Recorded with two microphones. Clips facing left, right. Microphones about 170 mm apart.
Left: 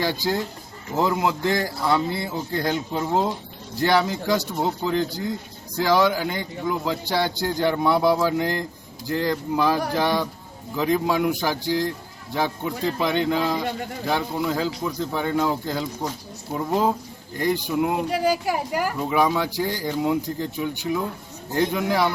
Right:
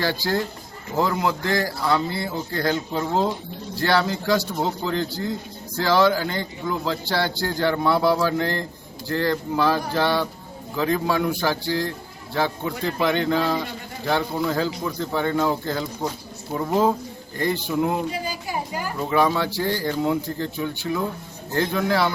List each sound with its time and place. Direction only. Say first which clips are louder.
0.0 s a man's voice: even; 15° left (ahead or behind)
18.1 s a woman's voice: left 7 dB; 80° left
18.9 s a man's voice: right 3 dB; 10° left (ahead or behind)